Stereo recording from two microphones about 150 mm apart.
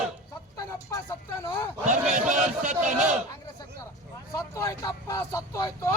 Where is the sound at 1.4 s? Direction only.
15° left (ahead or behind).